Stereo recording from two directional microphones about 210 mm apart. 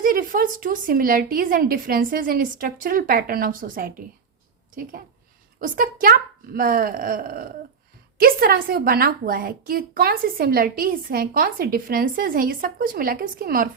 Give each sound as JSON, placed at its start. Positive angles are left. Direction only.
{"t": 0.0, "sound": "a woman's voice", "side_deg": -40}